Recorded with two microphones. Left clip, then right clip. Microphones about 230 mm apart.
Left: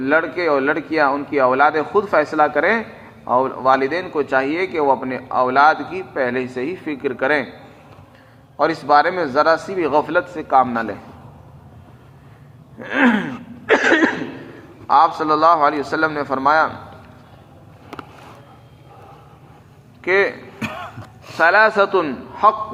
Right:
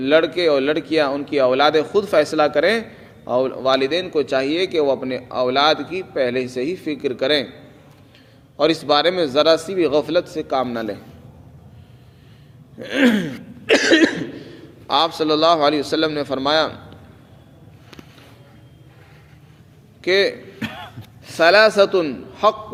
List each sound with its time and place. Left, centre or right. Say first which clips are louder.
0.0 s a man's voice: right 2 dB; right
4.1 s a man's voice: left 1 dB; right
8.5 s a man's voice: left 2 dB; right
12.8 s a sound: left 1 dB; right
15.0 s a man's voice: left 2 dB; right
20.0 s speech: even; right
20.6 s a sound: left 3 dB; centre
21.3 s speech: right 1 dB; right